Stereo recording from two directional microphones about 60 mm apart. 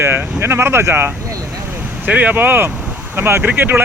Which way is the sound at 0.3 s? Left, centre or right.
Right.